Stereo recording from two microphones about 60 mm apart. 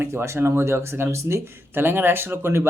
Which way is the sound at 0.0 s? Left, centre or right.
Right.